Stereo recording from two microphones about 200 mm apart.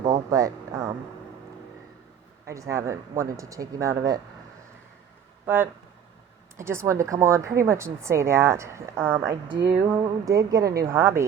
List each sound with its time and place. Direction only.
0.0 s a sound: 15° right (ahead or behind)
2.5 s speech: 15° right (ahead or behind)
5.5 s speech: 10° right (ahead or behind)